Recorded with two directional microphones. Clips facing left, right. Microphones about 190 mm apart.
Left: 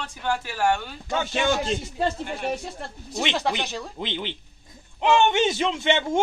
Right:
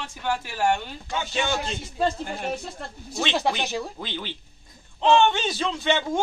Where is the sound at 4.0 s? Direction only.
20° left (ahead or behind).